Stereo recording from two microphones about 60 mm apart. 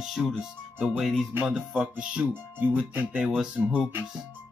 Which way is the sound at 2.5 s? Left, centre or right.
Right.